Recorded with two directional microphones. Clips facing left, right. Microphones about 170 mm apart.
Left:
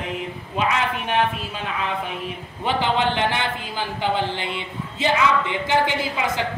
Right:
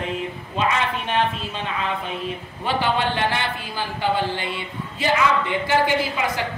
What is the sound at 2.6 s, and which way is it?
A woman's voice, 20° left (ahead or behind).